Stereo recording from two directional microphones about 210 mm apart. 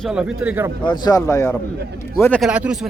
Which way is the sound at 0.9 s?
20° left (ahead or behind).